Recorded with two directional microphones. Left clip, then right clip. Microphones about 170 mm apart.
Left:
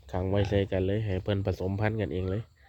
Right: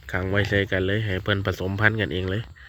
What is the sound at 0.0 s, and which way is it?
Speech, 10° left (ahead or behind).